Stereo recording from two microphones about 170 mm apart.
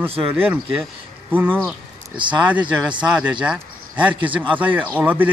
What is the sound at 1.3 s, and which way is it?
Speech, 10° right (ahead or behind).